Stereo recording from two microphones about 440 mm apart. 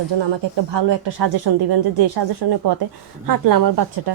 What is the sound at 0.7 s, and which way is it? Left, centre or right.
A woman's voice, right.